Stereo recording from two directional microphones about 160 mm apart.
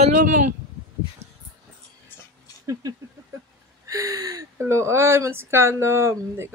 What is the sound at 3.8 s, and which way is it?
Speech, 20° right (ahead or behind).